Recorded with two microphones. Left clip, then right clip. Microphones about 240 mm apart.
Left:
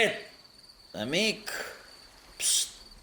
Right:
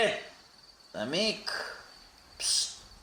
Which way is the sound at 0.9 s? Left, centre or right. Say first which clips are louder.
Left 2 dB; left.